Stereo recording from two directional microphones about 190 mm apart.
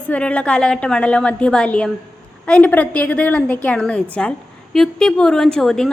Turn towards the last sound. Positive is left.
turn(degrees=0)  # may be behind; listen again after turning